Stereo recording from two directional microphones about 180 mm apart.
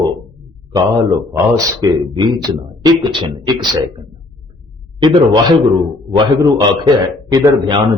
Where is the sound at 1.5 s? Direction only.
20° right (ahead or behind).